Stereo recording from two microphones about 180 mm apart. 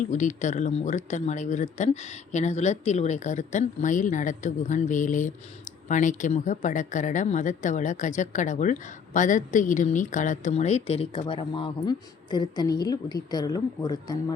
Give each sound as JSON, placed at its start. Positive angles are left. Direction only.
{"t": 0.0, "sound": "speech", "side_deg": 45}